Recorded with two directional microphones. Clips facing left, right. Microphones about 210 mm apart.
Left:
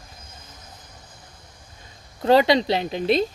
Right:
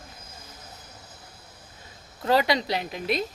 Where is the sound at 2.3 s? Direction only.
25° left (ahead or behind).